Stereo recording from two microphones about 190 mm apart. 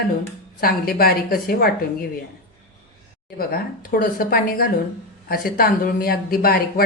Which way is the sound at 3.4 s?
50° left (ahead or behind).